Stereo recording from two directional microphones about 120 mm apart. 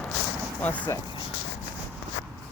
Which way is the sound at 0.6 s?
15° left (ahead or behind).